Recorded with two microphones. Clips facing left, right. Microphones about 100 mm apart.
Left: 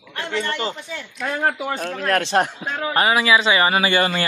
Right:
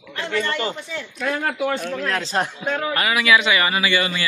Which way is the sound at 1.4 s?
40° left (ahead or behind).